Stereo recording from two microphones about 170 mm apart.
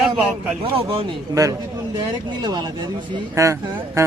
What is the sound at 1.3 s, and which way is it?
A man's voice, 20° right (ahead or behind).